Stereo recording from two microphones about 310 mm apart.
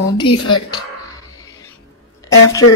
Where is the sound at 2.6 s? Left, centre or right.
Left.